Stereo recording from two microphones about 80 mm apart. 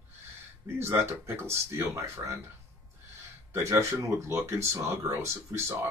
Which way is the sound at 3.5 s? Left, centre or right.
Right.